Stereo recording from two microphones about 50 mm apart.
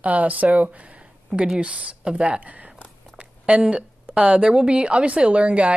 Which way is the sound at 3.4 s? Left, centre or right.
Right.